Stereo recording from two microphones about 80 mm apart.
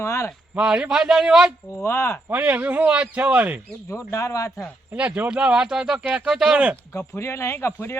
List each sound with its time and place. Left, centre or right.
0.0 s a sound: left
0.5 s speech: centre
1.8 s speech: left
2.3 s a man's voice: centre
3.8 s speech: left
4.9 s speech: centre
6.9 s speech: left